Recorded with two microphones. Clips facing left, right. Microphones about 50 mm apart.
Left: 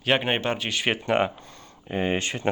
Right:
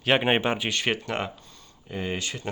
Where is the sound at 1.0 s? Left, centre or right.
Left.